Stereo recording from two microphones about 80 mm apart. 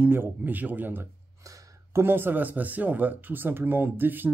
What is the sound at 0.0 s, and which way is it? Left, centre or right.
Speech, right.